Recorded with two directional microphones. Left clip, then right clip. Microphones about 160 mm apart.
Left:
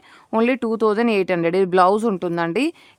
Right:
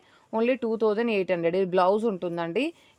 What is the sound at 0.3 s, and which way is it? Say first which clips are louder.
Speech: left 5 dB; 45° left (ahead or behind).